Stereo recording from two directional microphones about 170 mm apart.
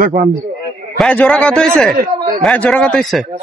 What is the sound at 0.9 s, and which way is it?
Speech, 5° left (ahead or behind).